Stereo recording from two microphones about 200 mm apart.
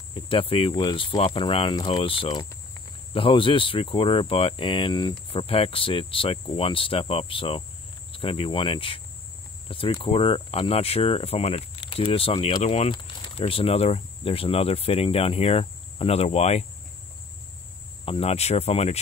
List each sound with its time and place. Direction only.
0.1 s speech: 25° left (ahead or behind)
18.0 s speech: 30° left (ahead or behind)